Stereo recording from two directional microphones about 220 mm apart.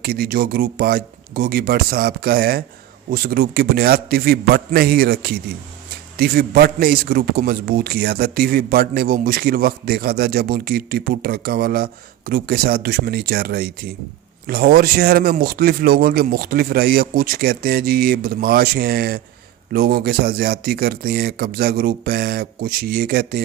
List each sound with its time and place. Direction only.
0.0 s a man's voice: 45° right (ahead or behind)